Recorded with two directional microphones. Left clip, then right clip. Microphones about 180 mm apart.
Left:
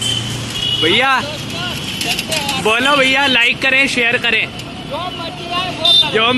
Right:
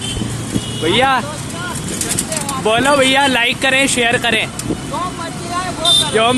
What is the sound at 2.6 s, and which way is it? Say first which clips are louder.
Speech: right 1 dB; 15° right (ahead or behind).